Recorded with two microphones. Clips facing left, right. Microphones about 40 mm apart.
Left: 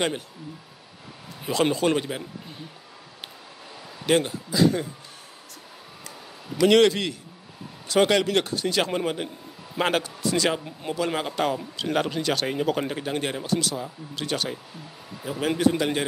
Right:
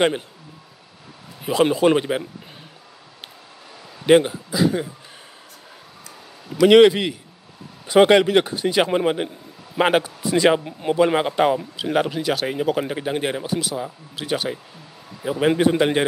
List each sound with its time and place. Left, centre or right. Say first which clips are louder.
1.4 s speech: right 5 dB; centre
4.0 s speech: right 7 dB; centre
6.7 s a man's voice: right 7 dB; centre
11.7 s speech: right 4 dB; centre
15.2 s a man's voice: right 5 dB; right